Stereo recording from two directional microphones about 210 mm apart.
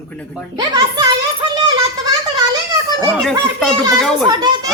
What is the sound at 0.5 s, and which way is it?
Speech, 20° right (ahead or behind).